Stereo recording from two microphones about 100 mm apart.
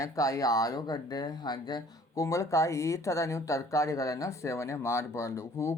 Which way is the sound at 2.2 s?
30° left (ahead or behind).